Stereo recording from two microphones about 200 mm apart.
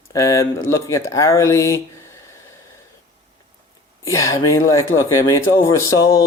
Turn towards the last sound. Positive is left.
turn(degrees=15)  # may be behind; listen again after turning